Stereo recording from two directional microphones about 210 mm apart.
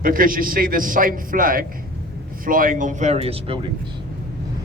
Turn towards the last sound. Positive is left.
turn(degrees=-25)  # may be behind; listen again after turning